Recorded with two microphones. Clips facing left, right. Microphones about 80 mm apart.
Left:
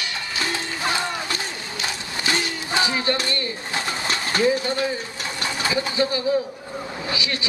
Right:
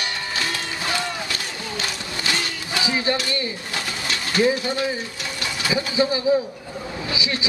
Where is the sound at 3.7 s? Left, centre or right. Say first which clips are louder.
Left 4 dB; left.